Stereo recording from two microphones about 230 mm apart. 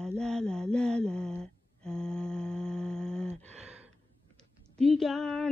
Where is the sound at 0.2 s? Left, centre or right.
Centre.